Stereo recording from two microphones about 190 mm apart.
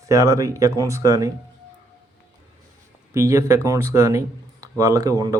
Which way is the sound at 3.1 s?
15° right (ahead or behind).